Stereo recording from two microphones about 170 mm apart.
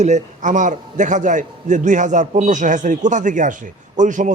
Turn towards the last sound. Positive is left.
turn(degrees=-50)  # may be behind; listen again after turning